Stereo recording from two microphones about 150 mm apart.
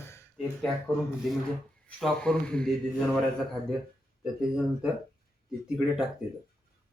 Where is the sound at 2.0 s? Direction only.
5° left (ahead or behind).